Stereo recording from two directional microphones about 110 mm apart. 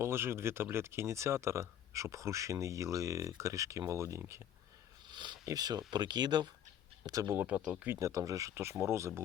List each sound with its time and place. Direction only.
0.0 s speech: 20° right (ahead or behind)
5.0 s speech: 40° right (ahead or behind)
7.3 s speech: 10° right (ahead or behind)
7.9 s speech: 30° right (ahead or behind)